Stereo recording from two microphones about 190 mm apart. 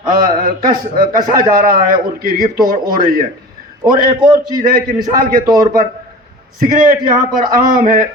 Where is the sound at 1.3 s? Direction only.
50° right (ahead or behind).